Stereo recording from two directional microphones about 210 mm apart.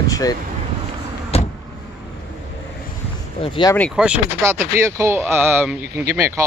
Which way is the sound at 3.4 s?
25° left (ahead or behind).